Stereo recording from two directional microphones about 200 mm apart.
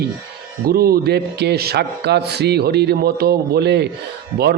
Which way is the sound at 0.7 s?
50° right (ahead or behind).